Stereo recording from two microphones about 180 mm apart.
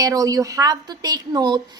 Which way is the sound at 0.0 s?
20° right (ahead or behind).